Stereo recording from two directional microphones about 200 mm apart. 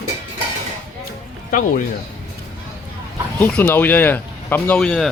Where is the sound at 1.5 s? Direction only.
40° left (ahead or behind).